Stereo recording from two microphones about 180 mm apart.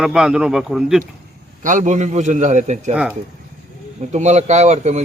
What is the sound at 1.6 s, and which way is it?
A man's voice, 45° right (ahead or behind).